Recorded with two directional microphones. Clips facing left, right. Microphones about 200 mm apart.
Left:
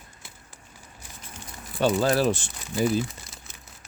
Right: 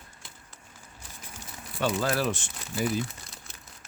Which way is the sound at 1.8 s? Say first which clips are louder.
Left 5 dB; 30° left (ahead or behind).